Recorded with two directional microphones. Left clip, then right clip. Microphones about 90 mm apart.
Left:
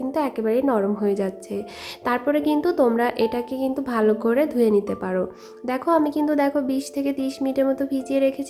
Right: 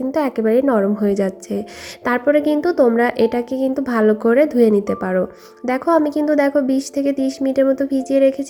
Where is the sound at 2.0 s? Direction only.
40° right (ahead or behind).